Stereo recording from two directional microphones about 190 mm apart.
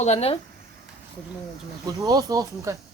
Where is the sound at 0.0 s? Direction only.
35° left (ahead or behind).